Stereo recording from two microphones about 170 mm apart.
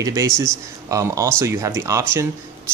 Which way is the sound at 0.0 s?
20° right (ahead or behind).